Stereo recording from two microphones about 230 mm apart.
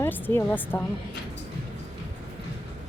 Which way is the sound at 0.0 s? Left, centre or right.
Centre.